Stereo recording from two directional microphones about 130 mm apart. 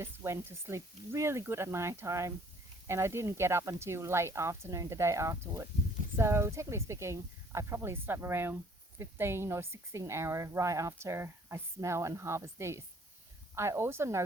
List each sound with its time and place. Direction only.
0.0 s speech: 20° right (ahead or behind)